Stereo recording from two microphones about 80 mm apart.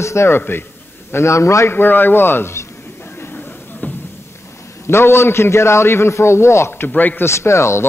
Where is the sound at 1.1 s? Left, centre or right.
Left; by 3.9 s centre.